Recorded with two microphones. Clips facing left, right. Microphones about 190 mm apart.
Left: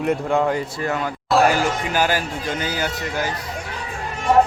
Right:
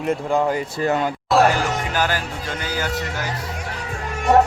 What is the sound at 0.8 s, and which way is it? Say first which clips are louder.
Speech: right 4 dB; 25° right (ahead or behind).